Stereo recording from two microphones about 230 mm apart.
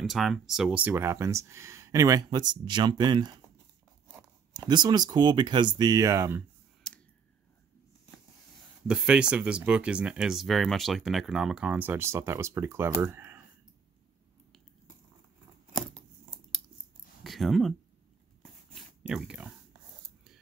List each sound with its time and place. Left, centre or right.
0.0 s speech: centre
4.6 s speech: centre
6.8 s clicking: centre
8.8 s speech: centre
17.2 s a sound: centre
19.0 s speech: centre